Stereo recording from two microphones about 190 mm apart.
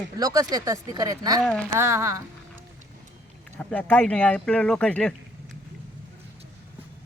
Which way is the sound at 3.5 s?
10° left (ahead or behind).